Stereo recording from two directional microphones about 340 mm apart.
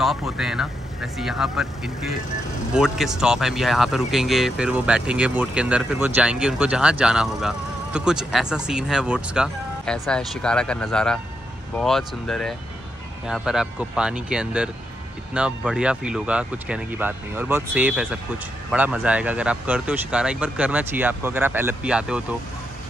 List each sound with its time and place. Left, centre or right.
0.0 s speech: centre